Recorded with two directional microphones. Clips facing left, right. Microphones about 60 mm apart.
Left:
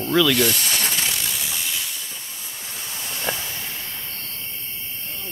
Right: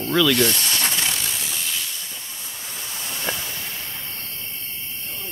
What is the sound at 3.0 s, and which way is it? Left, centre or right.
Hiss, centre.